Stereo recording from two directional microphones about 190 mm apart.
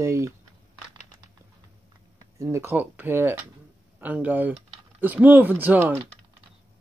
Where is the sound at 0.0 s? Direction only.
15° right (ahead or behind).